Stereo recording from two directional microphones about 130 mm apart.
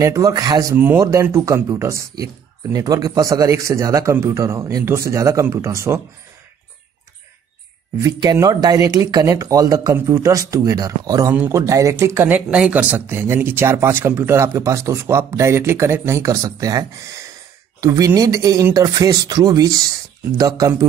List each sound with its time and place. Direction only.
0.0 s speech: 25° right (ahead or behind)
0.7 s speech: 20° right (ahead or behind)
8.0 s speech: 30° right (ahead or behind)